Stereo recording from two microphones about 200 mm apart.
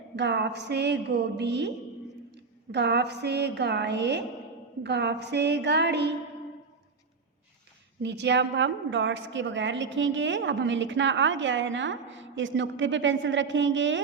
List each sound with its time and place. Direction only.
0.2 s a woman's voice: 60° right (ahead or behind)
8.0 s a woman's voice: 60° right (ahead or behind)